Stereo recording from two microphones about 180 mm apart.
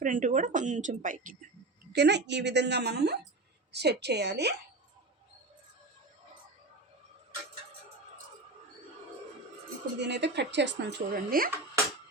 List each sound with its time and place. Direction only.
0.0 s speech: 45° right (ahead or behind)
1.9 s speech: 70° right (ahead or behind)
10.0 s speech: 70° right (ahead or behind); by 11.5 s 55° right (ahead or behind)